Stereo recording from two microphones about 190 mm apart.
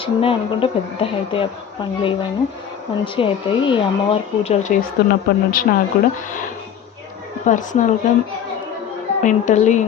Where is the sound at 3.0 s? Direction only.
25° left (ahead or behind).